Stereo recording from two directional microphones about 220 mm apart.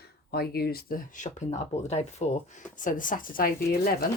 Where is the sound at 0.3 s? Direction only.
45° left (ahead or behind).